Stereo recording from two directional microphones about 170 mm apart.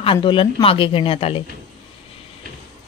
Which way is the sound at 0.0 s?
30° left (ahead or behind).